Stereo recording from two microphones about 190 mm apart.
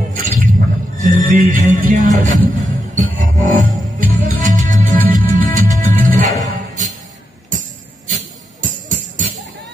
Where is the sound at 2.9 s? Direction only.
40° right (ahead or behind).